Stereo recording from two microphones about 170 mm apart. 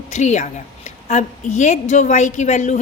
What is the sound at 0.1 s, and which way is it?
A woman's voice, 45° left (ahead or behind).